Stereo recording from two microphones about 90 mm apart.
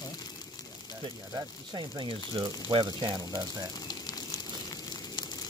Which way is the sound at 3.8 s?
50° left (ahead or behind).